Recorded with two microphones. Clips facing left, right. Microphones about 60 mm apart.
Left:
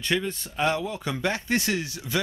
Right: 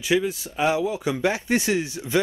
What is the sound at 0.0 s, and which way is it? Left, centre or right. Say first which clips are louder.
Speech: right 5 dB; centre.